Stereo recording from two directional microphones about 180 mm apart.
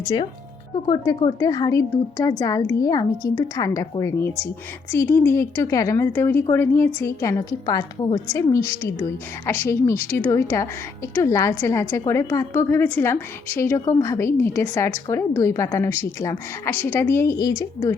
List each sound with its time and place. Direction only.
0.0 s a woman's voice: 25° left (ahead or behind)